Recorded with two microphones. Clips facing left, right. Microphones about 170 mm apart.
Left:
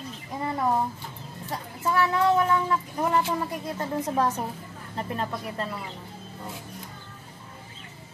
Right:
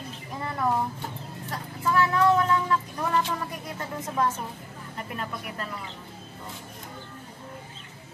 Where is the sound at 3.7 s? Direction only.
35° left (ahead or behind).